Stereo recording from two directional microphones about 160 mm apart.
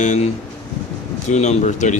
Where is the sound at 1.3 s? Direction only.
45° left (ahead or behind).